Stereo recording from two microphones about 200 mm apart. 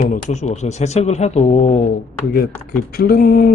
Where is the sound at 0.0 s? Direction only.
35° left (ahead or behind).